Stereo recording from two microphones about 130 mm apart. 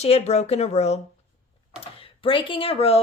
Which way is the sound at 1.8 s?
45° left (ahead or behind).